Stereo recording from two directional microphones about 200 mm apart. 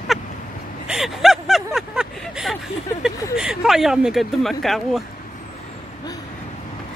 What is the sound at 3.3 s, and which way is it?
Speech, 5° right (ahead or behind).